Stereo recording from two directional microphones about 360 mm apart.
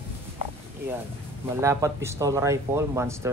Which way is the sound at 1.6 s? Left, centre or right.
Centre.